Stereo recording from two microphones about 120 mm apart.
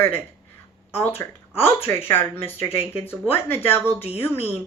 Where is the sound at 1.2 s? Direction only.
25° left (ahead or behind).